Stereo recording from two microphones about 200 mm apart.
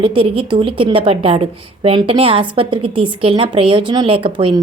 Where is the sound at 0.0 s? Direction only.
25° right (ahead or behind).